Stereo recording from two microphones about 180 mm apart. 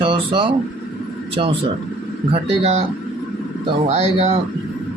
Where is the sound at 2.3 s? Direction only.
35° right (ahead or behind).